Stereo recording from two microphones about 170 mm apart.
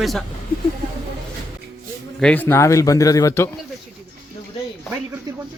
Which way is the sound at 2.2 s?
10° left (ahead or behind).